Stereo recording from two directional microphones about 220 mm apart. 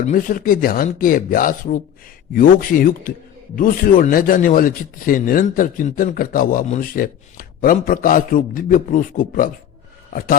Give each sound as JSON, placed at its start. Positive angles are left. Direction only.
{"t": 0.0, "sound": "a man's voice", "side_deg": 35}